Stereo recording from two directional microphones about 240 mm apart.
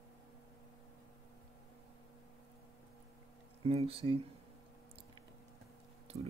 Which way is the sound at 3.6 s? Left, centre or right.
Right.